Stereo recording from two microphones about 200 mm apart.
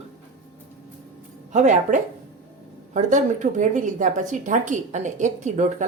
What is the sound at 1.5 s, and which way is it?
Speech, 35° right (ahead or behind).